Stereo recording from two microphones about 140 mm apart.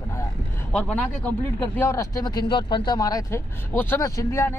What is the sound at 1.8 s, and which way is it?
Speech, 20° left (ahead or behind).